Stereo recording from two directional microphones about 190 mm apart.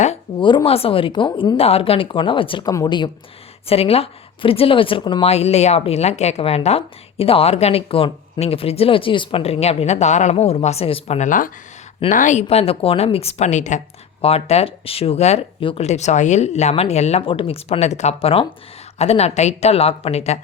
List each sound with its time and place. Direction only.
0.0 s a woman's voice: 30° left (ahead or behind)